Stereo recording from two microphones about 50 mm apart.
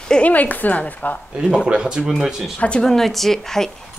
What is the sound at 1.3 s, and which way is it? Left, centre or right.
Speech, centre.